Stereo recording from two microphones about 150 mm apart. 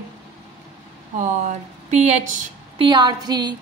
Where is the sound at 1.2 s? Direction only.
55° right (ahead or behind).